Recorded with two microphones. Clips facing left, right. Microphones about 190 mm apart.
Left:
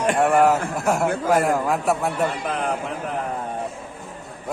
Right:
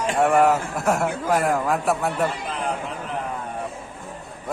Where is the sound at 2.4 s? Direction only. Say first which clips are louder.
Left 3 dB; 55° left (ahead or behind).